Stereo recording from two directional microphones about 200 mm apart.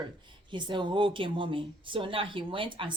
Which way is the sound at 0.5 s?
25° right (ahead or behind).